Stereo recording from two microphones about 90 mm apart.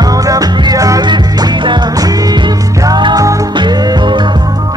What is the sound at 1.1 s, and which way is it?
Music, 55° right (ahead or behind).